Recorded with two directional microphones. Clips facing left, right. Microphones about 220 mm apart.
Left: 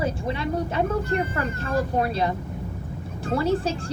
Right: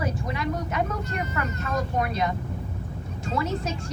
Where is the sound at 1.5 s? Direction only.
30° left (ahead or behind).